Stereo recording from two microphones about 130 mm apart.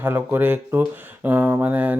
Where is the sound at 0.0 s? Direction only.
15° right (ahead or behind).